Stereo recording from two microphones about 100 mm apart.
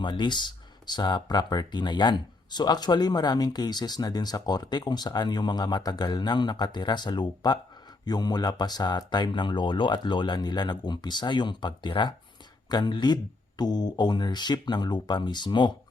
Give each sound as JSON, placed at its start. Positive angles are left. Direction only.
{"t": 0.0, "sound": "speech", "side_deg": 50}